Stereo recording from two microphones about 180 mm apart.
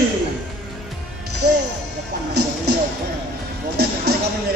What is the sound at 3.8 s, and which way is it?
Music, 60° right (ahead or behind).